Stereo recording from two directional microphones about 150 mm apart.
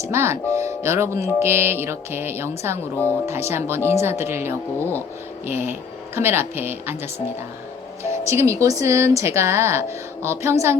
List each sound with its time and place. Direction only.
0.0 s speech: 15° right (ahead or behind)
4.8 s speech: 15° left (ahead or behind)
5.5 s speech: 15° right (ahead or behind)
8.3 s speech: 20° right (ahead or behind)